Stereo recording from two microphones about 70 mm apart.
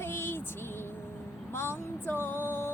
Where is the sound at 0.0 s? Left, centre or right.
Left.